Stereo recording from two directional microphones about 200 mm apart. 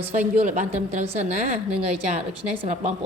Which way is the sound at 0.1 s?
35° right (ahead or behind).